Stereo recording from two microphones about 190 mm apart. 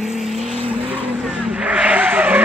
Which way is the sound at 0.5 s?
30° right (ahead or behind).